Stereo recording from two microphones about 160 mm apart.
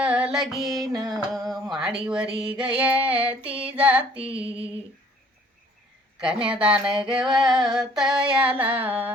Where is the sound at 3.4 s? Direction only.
35° right (ahead or behind).